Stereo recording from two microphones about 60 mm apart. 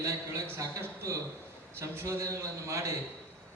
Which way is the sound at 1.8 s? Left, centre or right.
Right.